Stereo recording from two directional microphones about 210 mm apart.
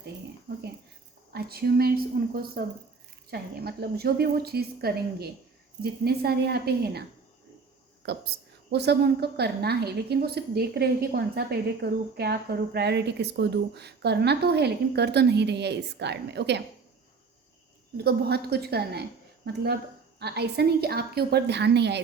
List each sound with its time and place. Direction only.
0.0 s a sound: 50° right (ahead or behind)
1.3 s a woman's voice: 45° right (ahead or behind)
8.0 s a woman's voice: 50° right (ahead or behind)
17.9 s a woman's voice: 50° right (ahead or behind)